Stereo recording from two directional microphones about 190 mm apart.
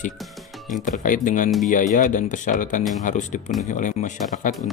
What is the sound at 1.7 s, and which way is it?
Speech, 40° left (ahead or behind).